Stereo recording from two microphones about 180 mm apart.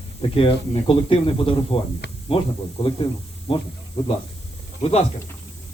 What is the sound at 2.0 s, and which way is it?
Spray, 70° left (ahead or behind).